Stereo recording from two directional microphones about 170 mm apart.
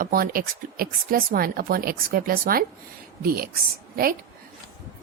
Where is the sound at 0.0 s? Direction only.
55° right (ahead or behind).